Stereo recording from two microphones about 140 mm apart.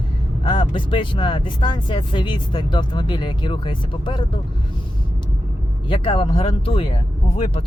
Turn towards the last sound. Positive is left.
turn(degrees=45)  # may be behind; listen again after turning